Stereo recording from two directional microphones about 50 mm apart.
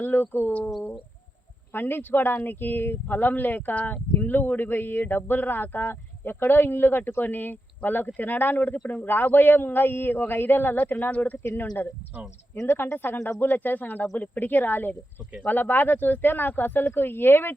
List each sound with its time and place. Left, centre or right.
0.0 s speech: left
1.7 s speech: left